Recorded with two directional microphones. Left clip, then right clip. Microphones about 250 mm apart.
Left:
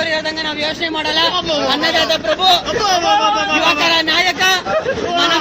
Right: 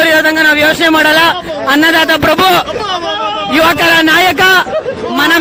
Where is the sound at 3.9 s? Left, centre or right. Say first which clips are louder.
Right 7 dB; right.